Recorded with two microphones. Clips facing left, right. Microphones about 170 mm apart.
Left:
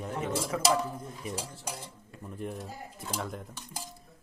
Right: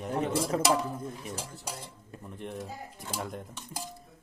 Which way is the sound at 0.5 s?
35° right (ahead or behind).